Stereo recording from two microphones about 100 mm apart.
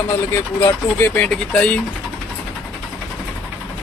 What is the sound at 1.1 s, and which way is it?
Speech, 15° left (ahead or behind).